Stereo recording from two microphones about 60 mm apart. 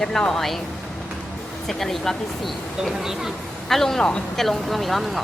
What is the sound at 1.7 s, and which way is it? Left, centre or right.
Speech, centre.